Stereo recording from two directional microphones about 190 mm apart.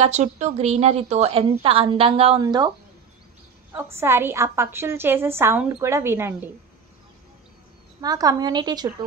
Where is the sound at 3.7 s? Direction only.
10° right (ahead or behind).